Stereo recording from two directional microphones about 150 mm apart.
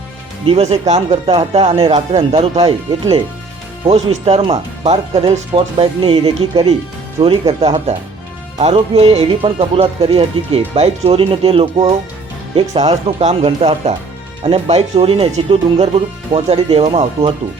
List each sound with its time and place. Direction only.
0.4 s speech: 40° right (ahead or behind)
8.5 s speech: 45° right (ahead or behind)